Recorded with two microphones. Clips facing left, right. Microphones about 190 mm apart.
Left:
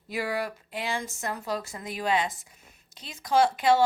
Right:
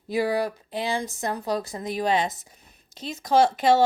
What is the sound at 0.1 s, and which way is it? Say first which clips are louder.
Speech: right 6 dB; 35° right (ahead or behind).